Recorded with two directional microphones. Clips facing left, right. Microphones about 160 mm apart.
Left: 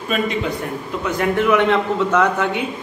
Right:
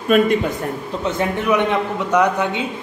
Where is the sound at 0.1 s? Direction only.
50° right (ahead or behind).